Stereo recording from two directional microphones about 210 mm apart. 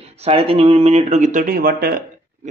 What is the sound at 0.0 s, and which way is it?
Speech, 30° right (ahead or behind).